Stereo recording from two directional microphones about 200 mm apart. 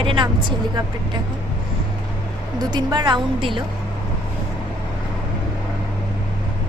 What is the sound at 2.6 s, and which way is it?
A woman's voice, 20° right (ahead or behind).